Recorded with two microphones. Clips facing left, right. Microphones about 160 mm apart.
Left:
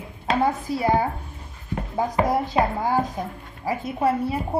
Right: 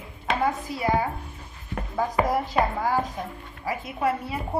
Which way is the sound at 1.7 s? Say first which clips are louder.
Left 2 dB; 20° left (ahead or behind).